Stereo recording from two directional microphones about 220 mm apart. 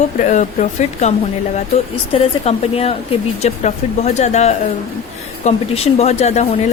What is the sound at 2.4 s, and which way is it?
A woman's voice, 30° left (ahead or behind).